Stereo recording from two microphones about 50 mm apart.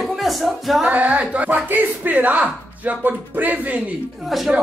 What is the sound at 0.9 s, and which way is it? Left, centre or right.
A woman's voice, right.